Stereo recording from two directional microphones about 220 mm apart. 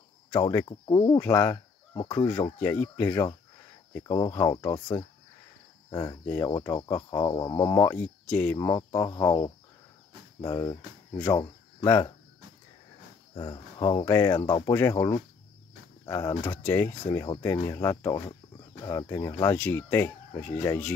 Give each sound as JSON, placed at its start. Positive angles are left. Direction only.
{"t": 0.3, "sound": "speech", "side_deg": 15}
{"t": 13.3, "sound": "speech", "side_deg": 20}